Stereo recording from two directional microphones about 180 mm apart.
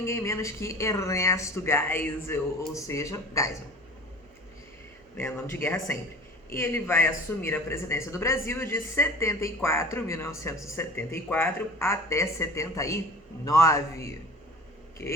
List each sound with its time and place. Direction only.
0.0 s speech: 15° left (ahead or behind)
5.1 s speech: 15° left (ahead or behind)